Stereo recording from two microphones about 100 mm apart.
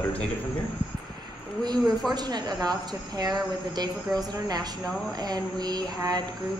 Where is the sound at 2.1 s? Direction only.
45° right (ahead or behind).